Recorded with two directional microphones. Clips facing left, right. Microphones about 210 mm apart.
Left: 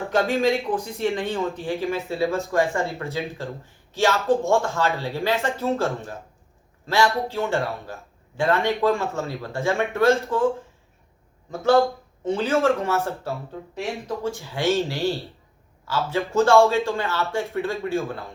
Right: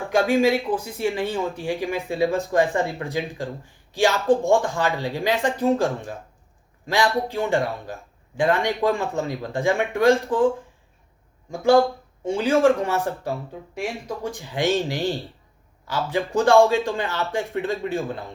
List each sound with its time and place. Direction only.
0.1 s a man's voice: 10° right (ahead or behind)
11.5 s speech: 10° right (ahead or behind)